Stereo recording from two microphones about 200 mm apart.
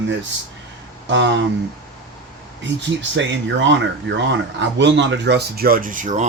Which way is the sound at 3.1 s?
65° right (ahead or behind).